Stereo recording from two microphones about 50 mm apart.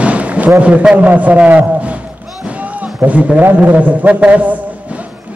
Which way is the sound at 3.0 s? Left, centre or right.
Right.